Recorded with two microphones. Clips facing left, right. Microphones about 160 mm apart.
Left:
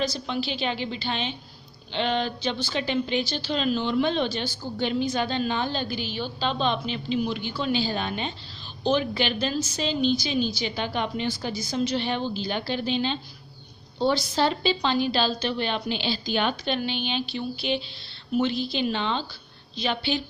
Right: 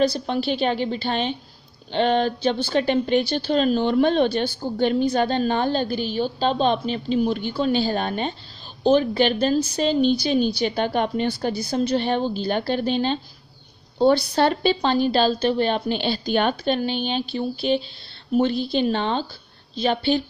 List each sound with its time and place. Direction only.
0.0 s a woman's voice: 55° right (ahead or behind)